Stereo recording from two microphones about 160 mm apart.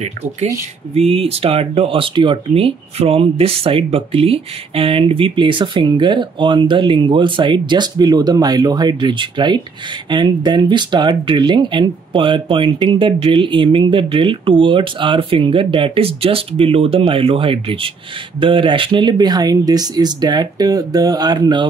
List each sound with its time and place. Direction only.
0.0 s speech: 45° right (ahead or behind)